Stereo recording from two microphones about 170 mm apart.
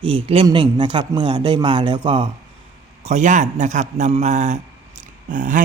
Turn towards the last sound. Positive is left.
turn(degrees=-50)  # may be behind; listen again after turning